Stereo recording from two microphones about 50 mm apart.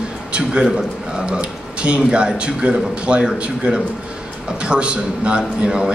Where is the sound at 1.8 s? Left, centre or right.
Right.